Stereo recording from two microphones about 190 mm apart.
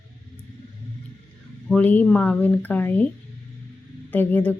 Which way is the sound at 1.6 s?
5° left (ahead or behind).